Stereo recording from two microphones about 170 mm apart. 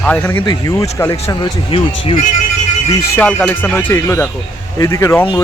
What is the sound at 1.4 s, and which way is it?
Speech, 30° left (ahead or behind).